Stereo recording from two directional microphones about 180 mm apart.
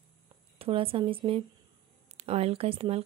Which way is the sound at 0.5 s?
30° right (ahead or behind).